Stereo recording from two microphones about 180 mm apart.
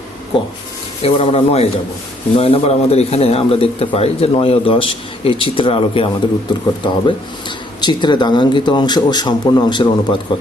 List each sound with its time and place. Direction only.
1.0 s a man's voice: 30° left (ahead or behind)